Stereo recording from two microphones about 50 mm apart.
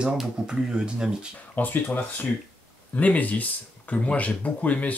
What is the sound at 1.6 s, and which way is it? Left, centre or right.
Speech, left.